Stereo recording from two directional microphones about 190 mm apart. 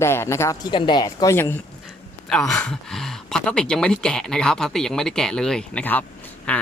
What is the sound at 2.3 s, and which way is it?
Speech, 5° left (ahead or behind).